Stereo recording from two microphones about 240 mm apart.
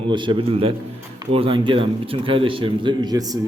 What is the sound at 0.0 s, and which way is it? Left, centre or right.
A man's voice, centre.